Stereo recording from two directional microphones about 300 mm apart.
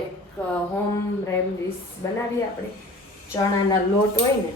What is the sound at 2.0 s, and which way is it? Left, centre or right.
Speech, centre.